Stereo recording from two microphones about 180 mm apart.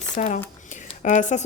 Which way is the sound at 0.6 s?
45° left (ahead or behind).